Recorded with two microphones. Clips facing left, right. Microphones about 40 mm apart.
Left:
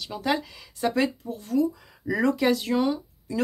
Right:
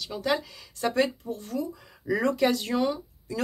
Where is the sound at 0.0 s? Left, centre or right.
Centre.